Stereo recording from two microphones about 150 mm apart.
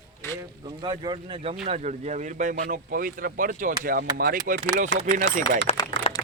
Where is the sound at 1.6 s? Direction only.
50° right (ahead or behind).